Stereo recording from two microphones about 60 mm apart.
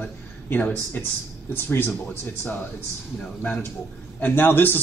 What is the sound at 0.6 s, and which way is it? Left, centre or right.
Speech, left.